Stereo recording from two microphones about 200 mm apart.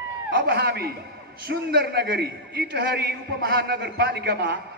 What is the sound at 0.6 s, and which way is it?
A man's voice, 50° right (ahead or behind).